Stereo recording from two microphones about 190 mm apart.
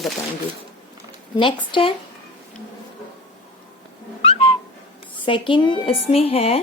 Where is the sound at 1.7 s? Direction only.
25° left (ahead or behind).